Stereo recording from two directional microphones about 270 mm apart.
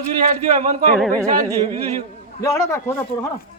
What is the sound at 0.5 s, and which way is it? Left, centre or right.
Speech, right.